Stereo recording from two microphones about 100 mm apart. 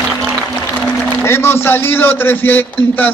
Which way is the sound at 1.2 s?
25° left (ahead or behind).